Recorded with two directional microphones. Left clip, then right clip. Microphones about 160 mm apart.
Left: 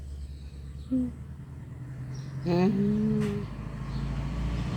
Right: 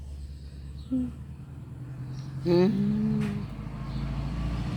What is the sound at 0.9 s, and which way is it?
Speech, centre (ahead or behind).